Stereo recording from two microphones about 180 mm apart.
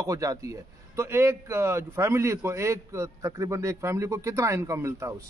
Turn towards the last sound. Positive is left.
turn(degrees=-15)  # may be behind; listen again after turning